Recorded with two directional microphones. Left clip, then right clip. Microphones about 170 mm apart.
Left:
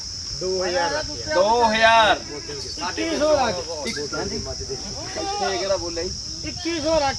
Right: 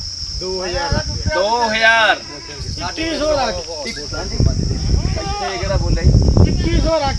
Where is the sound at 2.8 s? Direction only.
50° right (ahead or behind).